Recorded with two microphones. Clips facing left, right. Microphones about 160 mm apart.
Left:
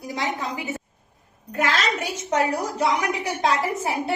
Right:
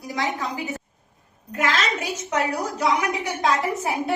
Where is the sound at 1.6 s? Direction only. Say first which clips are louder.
Even; 30° left (ahead or behind).